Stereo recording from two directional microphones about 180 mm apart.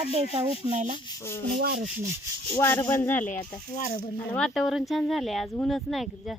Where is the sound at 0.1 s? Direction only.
35° right (ahead or behind).